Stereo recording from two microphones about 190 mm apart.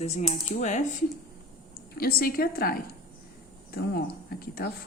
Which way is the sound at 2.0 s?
55° left (ahead or behind).